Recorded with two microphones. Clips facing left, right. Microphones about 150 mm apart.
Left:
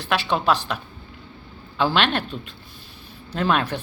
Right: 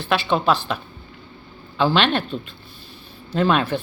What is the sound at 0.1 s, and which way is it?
Speech, 5° left (ahead or behind).